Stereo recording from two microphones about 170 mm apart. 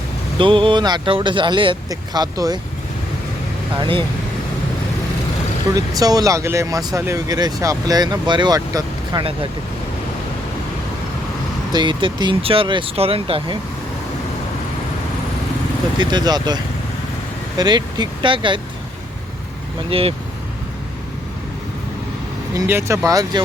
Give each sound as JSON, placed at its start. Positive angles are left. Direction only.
{"t": 0.3, "sound": "speech", "side_deg": -30}
{"t": 3.8, "sound": "speech", "side_deg": -30}
{"t": 5.7, "sound": "speech", "side_deg": -20}
{"t": 11.7, "sound": "speech", "side_deg": -25}
{"t": 16.0, "sound": "speech", "side_deg": -25}
{"t": 17.6, "sound": "speech", "side_deg": -25}
{"t": 19.9, "sound": "speech", "side_deg": -35}
{"t": 22.5, "sound": "speech", "side_deg": -15}